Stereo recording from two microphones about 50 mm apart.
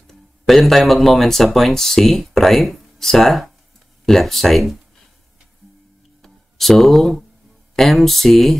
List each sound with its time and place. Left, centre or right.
0.0 s speech: centre
6.2 s a sound: centre
7.7 s speech: centre